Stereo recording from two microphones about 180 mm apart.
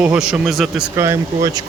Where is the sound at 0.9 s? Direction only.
15° right (ahead or behind).